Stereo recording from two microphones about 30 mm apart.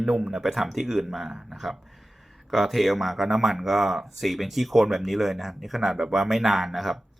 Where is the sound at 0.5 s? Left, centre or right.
Centre.